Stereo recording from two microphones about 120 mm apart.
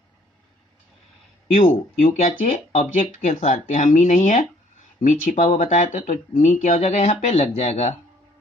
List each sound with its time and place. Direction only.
1.5 s speech: 80° left; by 7.9 s 60° left (ahead or behind)